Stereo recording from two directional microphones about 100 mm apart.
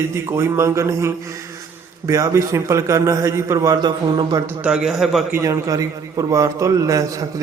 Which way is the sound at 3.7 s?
50° right (ahead or behind).